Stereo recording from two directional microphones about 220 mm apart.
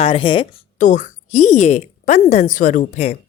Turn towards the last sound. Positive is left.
turn(degrees=30)  # may be behind; listen again after turning